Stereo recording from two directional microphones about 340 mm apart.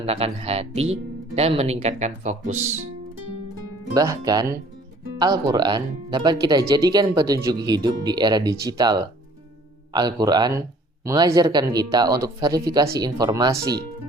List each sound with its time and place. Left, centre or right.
0.0 s speech: centre
3.9 s speech: centre